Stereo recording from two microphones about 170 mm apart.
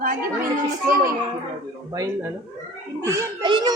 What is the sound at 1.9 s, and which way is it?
Speech, 20° right (ahead or behind).